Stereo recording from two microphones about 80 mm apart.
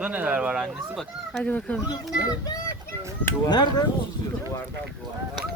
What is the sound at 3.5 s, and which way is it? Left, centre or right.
Speech, left.